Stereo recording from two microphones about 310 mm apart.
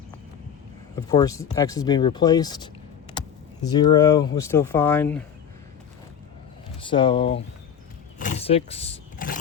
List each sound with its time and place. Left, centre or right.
0.9 s speech: centre
3.1 s a sound: centre
4.4 s speech: centre
6.7 s speech: centre
8.2 s vehicle: left